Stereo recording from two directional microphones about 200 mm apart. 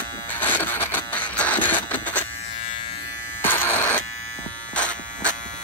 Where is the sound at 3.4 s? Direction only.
10° left (ahead or behind).